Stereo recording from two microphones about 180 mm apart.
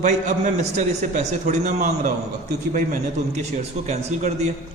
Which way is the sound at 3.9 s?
40° right (ahead or behind).